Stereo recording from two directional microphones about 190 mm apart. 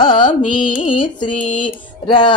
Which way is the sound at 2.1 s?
25° left (ahead or behind).